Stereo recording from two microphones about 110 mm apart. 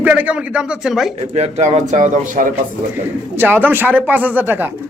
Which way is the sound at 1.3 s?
75° right (ahead or behind).